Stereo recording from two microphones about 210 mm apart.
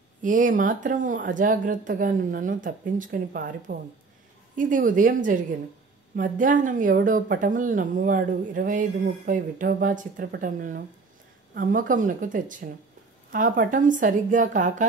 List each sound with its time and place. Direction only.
0.2 s speech: 40° right (ahead or behind)